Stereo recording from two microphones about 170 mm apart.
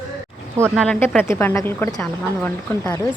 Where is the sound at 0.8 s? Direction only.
10° left (ahead or behind).